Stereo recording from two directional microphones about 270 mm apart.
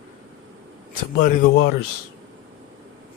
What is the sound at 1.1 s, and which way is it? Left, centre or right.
Speech, left.